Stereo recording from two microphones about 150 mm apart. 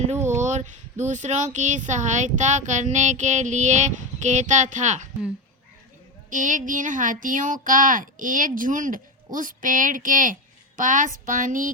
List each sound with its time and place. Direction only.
0.4 s speech: 55° right (ahead or behind)
6.3 s speech: 60° right (ahead or behind)